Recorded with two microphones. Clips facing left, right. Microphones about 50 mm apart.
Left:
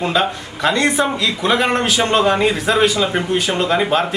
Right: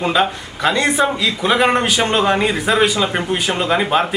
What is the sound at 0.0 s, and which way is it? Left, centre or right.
A man's voice, centre.